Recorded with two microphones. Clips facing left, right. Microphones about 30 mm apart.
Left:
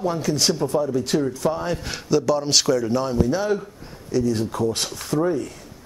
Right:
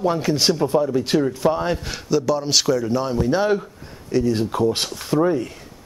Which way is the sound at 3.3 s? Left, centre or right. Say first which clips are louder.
Right 3 dB; right.